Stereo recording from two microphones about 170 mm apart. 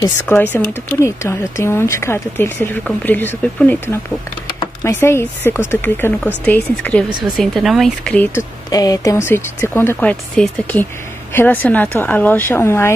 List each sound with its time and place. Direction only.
0.3 s speech: 10° left (ahead or behind)
7.1 s speech: 25° right (ahead or behind)
7.3 s speech: centre (ahead or behind)
8.4 s speech: 20° left (ahead or behind)